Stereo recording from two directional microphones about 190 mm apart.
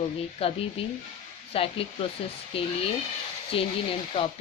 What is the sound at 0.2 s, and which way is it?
Speech, 30° left (ahead or behind).